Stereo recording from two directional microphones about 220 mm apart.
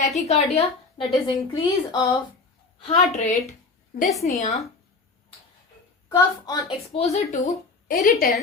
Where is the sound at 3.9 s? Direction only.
40° left (ahead or behind).